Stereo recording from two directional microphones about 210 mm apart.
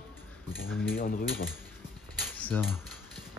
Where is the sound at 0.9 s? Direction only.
45° left (ahead or behind).